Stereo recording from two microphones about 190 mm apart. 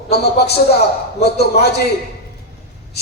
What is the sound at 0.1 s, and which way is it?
A man's voice, 60° left (ahead or behind).